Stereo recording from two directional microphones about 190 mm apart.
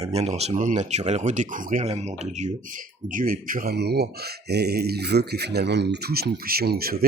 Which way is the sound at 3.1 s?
50° right (ahead or behind).